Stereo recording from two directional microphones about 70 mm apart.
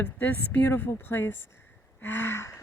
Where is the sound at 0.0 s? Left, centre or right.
Left.